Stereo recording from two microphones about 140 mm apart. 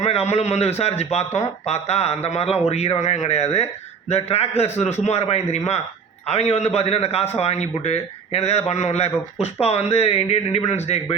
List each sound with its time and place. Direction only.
0.0 s a man's voice: 50° left (ahead or behind)